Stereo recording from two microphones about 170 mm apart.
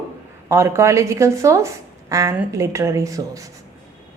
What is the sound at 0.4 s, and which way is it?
Speech, 15° right (ahead or behind).